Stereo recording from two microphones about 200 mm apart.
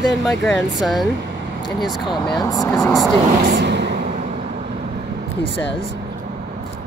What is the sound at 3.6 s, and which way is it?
Vehicle, 60° right (ahead or behind).